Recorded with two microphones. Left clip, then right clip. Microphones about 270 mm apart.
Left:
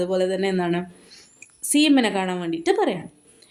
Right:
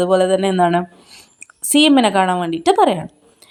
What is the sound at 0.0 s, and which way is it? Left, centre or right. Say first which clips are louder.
A woman's voice: right 8 dB; right.